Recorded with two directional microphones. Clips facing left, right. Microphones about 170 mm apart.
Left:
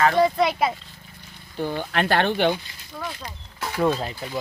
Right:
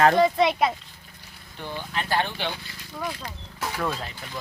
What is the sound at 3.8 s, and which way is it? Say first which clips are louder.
Speech: left 10 dB; 30° left (ahead or behind).